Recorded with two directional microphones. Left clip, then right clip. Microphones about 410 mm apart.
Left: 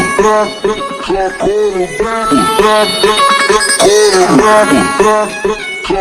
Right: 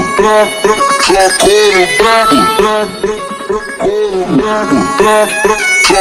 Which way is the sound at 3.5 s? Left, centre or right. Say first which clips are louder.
Left 6 dB; left.